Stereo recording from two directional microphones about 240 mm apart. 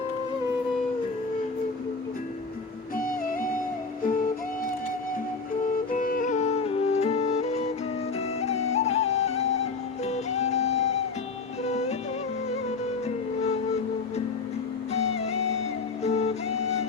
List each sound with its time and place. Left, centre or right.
2.9 s music: left
5.7 s music: left
14.9 s music: left